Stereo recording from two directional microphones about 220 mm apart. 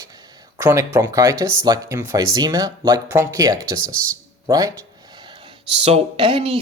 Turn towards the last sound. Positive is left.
turn(degrees=-25)  # may be behind; listen again after turning